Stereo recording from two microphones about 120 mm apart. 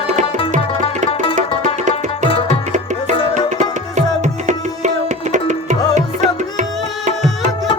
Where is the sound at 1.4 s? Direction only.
90° right.